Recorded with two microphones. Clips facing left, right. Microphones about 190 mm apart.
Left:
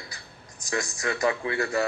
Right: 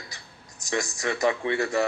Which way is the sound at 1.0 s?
25° right (ahead or behind).